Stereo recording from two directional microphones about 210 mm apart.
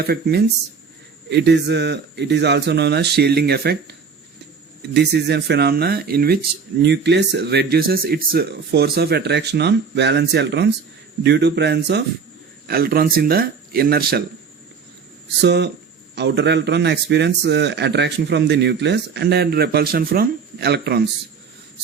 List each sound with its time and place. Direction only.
0.1 s speech: 50° right (ahead or behind)
4.9 s speech: 50° right (ahead or behind)
15.4 s speech: 55° right (ahead or behind)